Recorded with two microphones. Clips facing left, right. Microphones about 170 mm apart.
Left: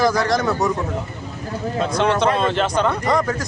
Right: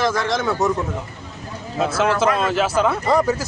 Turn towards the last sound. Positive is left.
turn(degrees=-10)  # may be behind; listen again after turning